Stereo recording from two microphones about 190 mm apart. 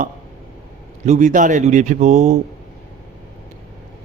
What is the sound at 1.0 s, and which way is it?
A man's voice, 40° right (ahead or behind).